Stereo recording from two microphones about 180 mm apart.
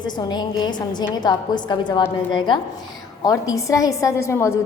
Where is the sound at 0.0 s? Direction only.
25° left (ahead or behind).